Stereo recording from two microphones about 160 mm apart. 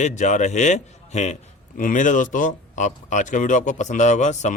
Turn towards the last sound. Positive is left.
turn(degrees=45)  # may be behind; listen again after turning